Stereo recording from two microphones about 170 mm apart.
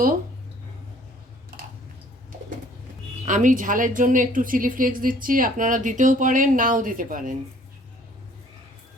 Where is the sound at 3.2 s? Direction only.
50° right (ahead or behind).